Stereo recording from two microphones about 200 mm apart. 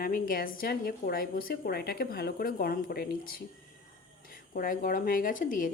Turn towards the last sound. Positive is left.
turn(degrees=40)  # may be behind; listen again after turning